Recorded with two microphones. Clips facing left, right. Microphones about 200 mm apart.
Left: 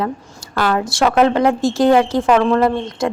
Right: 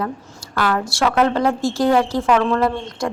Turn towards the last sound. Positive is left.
turn(degrees=20)  # may be behind; listen again after turning